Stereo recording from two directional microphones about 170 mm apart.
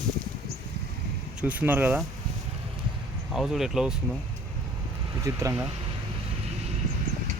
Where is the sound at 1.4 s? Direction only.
10° right (ahead or behind).